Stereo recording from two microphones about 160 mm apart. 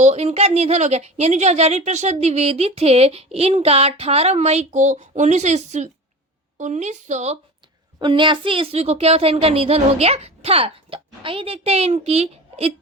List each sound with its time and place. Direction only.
0.0 s a woman's voice: 45° right (ahead or behind)
7.9 s a woman's voice: 30° right (ahead or behind)